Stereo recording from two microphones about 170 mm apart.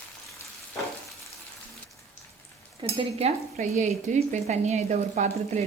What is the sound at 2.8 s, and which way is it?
Stir, 35° right (ahead or behind).